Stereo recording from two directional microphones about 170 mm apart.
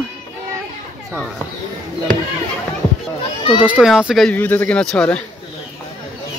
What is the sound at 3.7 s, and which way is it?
Speech, 5° right (ahead or behind).